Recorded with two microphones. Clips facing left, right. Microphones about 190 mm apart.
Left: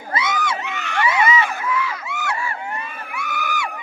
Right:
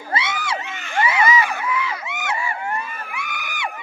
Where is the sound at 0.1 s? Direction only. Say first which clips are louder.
Left 2 dB; 30° right (ahead or behind).